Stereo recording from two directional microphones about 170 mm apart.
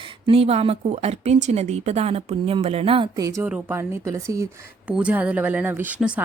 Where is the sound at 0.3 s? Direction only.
35° right (ahead or behind).